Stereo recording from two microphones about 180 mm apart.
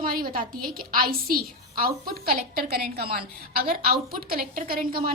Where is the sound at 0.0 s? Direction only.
55° right (ahead or behind).